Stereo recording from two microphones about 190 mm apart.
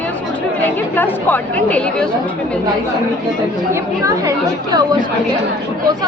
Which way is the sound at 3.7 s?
15° right (ahead or behind).